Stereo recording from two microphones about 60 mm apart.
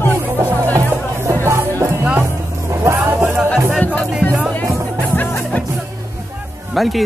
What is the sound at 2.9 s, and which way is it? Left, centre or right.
Music, right.